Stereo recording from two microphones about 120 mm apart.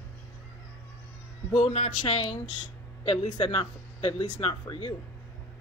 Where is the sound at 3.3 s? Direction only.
40° left (ahead or behind).